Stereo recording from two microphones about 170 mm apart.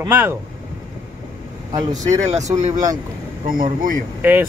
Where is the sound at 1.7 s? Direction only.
20° right (ahead or behind).